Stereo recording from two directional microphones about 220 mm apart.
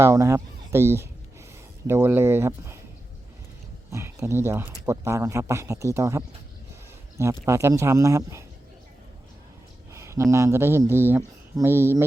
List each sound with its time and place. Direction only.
0.0 s a man's voice: 15° right (ahead or behind)
3.9 s a man's voice: 10° right (ahead or behind)
7.4 s a man's voice: 15° right (ahead or behind)
9.9 s a sound: 15° right (ahead or behind)
10.3 s a man's voice: 10° right (ahead or behind)